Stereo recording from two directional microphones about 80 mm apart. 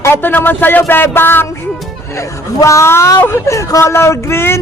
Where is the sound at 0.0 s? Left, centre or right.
Left.